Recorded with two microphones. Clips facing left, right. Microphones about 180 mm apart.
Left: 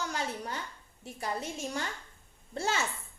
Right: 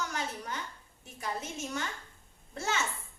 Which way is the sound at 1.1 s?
35° left (ahead or behind).